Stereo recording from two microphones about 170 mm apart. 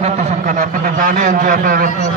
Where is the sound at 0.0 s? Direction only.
45° right (ahead or behind).